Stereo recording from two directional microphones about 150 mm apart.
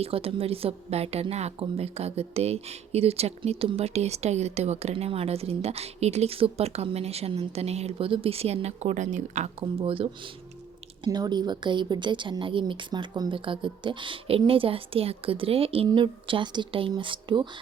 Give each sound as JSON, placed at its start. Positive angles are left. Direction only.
{"t": 0.0, "sound": "a woman's voice", "side_deg": -40}
{"t": 11.0, "sound": "a woman's voice", "side_deg": -30}